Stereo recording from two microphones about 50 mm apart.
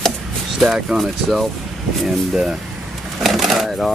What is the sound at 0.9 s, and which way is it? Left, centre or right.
Speech, right.